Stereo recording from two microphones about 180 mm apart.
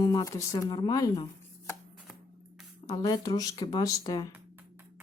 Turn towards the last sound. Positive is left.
turn(degrees=20)  # may be behind; listen again after turning